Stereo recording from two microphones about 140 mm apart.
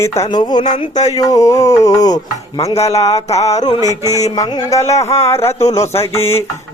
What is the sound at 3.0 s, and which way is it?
Mantra, 50° left (ahead or behind).